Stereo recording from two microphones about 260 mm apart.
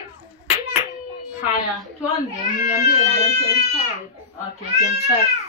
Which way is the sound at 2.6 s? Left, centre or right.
Left.